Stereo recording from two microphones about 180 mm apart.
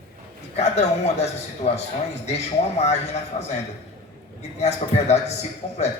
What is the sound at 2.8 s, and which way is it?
Speech, 40° left (ahead or behind).